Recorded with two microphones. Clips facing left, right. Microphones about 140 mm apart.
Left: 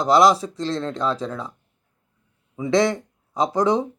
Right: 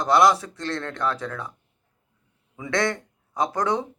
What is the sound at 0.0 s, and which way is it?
Speech, 15° left (ahead or behind).